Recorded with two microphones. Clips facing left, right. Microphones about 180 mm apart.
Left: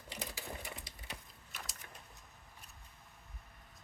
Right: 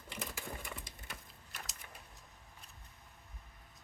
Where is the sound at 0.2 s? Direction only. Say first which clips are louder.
Right 1 dB; 50° right (ahead or behind).